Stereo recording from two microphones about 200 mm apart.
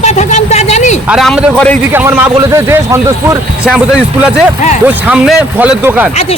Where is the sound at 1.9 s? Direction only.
10° right (ahead or behind).